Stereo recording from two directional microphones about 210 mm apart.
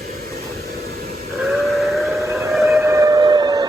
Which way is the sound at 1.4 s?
Centre (ahead or behind).